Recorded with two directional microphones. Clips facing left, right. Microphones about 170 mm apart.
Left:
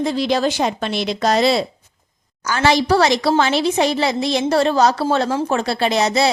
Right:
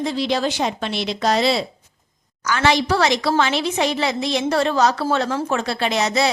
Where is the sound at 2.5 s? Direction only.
35° left (ahead or behind).